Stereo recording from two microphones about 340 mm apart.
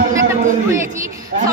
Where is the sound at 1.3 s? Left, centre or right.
Right.